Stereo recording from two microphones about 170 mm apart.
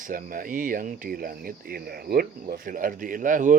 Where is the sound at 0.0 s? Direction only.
55° right (ahead or behind).